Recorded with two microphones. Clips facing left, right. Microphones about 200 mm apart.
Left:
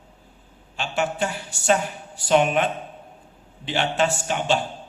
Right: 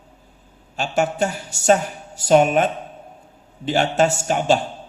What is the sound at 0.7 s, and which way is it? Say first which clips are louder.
A man's voice: right 4 dB; 40° right (ahead or behind).